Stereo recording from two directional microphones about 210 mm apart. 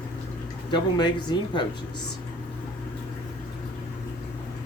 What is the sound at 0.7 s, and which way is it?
Speech, 20° left (ahead or behind).